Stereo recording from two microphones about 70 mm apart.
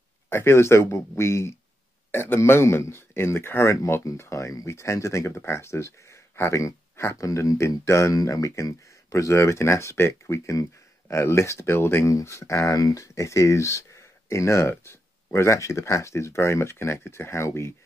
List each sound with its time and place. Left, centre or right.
0.3 s speech: left